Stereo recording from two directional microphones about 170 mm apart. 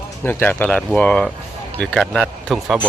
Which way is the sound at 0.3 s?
10° left (ahead or behind).